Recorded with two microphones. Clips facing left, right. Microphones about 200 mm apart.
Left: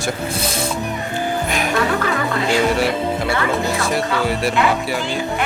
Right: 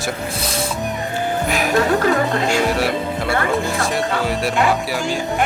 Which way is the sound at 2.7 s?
Centre (ahead or behind).